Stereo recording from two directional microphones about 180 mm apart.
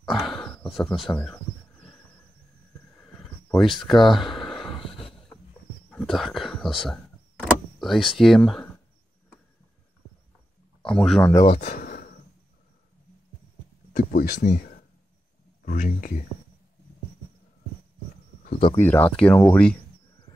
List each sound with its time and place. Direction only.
0.0 s a sound: centre (ahead or behind)
3.2 s a sound: centre (ahead or behind)
5.9 s power windows: 5° left (ahead or behind)
10.8 s speech: 5° left (ahead or behind)
11.3 s speech: 30° left (ahead or behind)
11.6 s a sound: 50° left (ahead or behind)
13.9 s speech: 50° left (ahead or behind)
15.6 s speech: 45° left (ahead or behind)
18.8 s speech: 10° left (ahead or behind)